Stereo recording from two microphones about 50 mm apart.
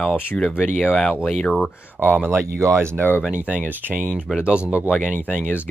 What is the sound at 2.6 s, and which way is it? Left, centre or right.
Speech, right.